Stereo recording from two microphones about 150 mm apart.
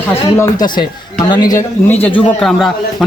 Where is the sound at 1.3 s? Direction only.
25° left (ahead or behind).